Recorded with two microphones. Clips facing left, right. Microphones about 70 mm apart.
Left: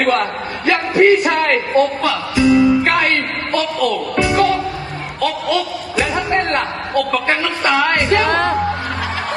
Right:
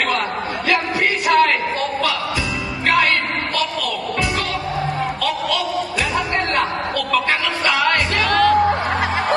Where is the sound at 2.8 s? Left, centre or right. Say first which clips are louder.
Left 1 dB; centre.